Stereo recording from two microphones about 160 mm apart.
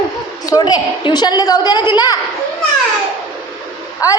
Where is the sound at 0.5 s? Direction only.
30° left (ahead or behind).